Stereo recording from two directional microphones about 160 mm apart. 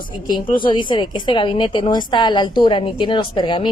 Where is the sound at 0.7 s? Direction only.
30° left (ahead or behind).